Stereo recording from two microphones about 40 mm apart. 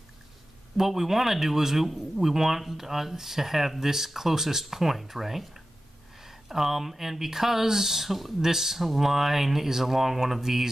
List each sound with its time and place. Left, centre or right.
0.7 s speech: centre